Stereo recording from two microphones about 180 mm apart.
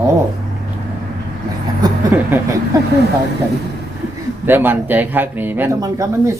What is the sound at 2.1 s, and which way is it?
Speech, 10° right (ahead or behind).